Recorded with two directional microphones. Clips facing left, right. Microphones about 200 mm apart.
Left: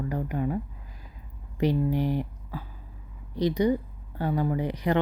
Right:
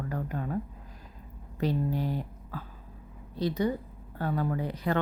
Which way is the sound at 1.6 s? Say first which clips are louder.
Left 4 dB; 15° left (ahead or behind).